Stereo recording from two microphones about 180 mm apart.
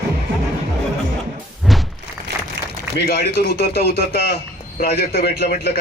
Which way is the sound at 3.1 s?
60° left (ahead or behind).